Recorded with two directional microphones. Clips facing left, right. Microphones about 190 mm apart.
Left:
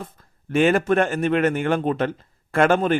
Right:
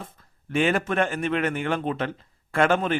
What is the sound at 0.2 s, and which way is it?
A man's voice, 45° left (ahead or behind).